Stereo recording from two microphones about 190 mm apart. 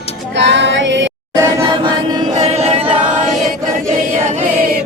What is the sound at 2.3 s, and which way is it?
Music, 35° right (ahead or behind).